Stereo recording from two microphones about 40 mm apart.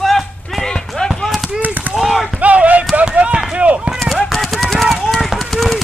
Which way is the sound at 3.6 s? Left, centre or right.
Right.